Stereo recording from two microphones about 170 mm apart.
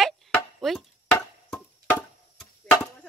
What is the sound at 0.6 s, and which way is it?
Speech, centre (ahead or behind).